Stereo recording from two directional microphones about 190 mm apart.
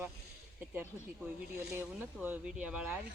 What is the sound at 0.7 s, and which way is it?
Speech, 10° right (ahead or behind).